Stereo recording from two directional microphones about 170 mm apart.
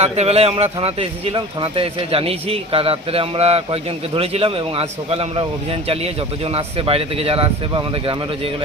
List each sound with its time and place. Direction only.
0.0 s a man's voice: 35° right (ahead or behind)